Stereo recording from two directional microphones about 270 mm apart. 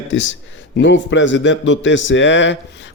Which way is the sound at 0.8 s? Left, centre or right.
Left.